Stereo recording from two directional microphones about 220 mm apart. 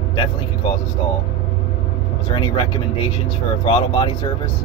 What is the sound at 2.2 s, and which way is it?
Speech, 20° left (ahead or behind).